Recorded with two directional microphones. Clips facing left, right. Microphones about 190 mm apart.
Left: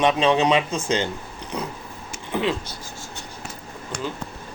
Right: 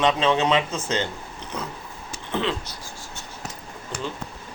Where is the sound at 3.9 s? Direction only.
5° right (ahead or behind).